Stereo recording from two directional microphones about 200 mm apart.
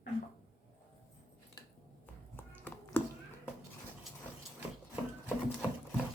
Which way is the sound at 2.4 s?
10° left (ahead or behind).